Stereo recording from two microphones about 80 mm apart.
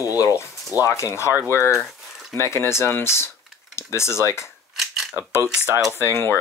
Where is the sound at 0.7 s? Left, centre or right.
Right.